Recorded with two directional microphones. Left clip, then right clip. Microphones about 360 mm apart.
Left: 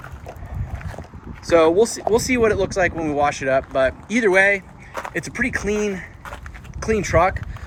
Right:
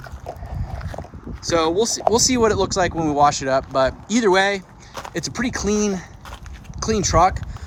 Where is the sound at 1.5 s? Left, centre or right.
Centre.